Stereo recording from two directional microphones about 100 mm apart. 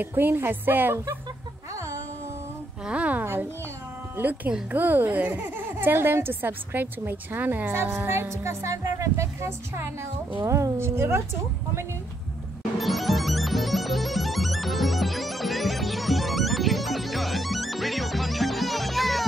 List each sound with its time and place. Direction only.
0.0 s a woman's voice: 20° right (ahead or behind)
2.8 s a sound: 15° right (ahead or behind)
4.2 s a woman's voice: 15° right (ahead or behind)
12.7 s music: centre (ahead or behind)